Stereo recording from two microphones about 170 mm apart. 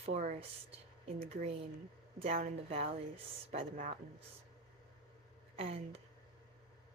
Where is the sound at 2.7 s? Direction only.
35° right (ahead or behind).